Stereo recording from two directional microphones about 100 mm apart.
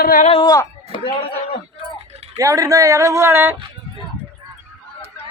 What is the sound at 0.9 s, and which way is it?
Speech, 55° left (ahead or behind).